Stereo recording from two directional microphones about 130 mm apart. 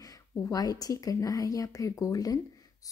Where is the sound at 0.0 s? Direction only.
25° left (ahead or behind).